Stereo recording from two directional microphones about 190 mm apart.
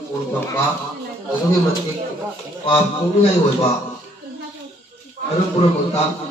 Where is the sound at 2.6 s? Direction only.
30° left (ahead or behind).